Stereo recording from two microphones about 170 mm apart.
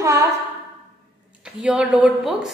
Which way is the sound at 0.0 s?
20° right (ahead or behind).